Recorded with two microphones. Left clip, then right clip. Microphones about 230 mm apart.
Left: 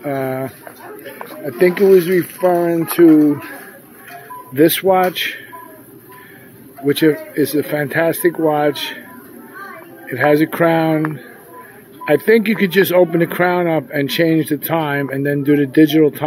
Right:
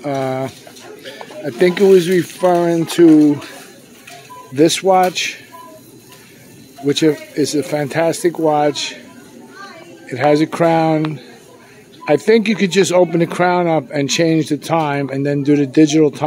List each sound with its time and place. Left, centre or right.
0.0 s speech: centre
4.6 s speech: centre
6.9 s speech: centre
10.0 s speech: centre